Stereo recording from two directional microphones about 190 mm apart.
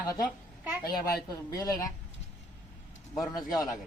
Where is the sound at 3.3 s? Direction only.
20° left (ahead or behind).